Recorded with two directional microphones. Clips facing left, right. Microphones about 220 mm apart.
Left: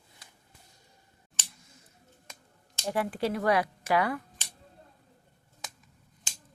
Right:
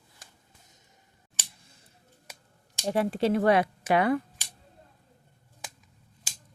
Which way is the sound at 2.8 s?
25° right (ahead or behind).